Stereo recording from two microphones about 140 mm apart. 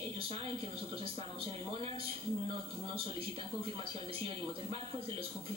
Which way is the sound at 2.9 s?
40° right (ahead or behind).